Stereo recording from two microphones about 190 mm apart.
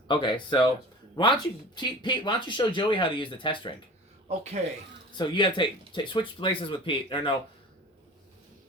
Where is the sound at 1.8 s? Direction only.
25° left (ahead or behind).